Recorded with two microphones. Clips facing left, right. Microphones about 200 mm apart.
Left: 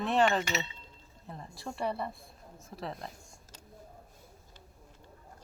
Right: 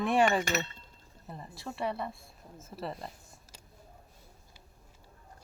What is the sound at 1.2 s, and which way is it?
Speech, 5° right (ahead or behind).